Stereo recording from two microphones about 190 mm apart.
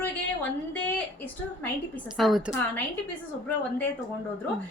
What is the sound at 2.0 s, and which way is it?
Speech, centre (ahead or behind).